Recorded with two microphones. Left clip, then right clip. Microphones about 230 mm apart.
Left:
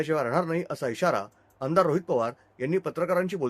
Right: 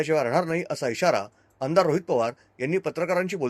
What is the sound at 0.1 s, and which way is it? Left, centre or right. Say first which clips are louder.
Speech: right 3 dB; centre.